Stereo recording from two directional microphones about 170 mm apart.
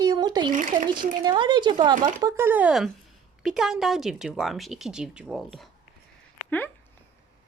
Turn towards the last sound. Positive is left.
turn(degrees=10)  # may be behind; listen again after turning